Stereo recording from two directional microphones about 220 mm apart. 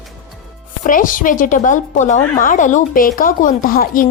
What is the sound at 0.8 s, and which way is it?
A woman's voice, 40° left (ahead or behind).